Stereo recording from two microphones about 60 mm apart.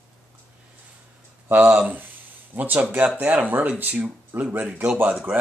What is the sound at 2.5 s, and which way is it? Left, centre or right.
Speech, right.